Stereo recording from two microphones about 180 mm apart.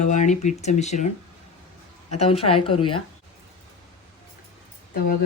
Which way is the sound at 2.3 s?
30° left (ahead or behind).